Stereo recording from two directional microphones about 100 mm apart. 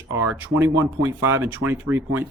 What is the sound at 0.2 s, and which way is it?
Speech, 15° right (ahead or behind).